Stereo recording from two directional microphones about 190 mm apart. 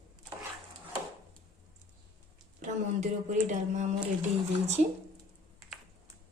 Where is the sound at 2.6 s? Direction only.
40° right (ahead or behind).